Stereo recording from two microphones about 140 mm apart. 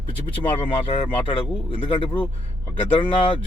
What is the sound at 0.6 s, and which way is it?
A man's voice, 40° left (ahead or behind).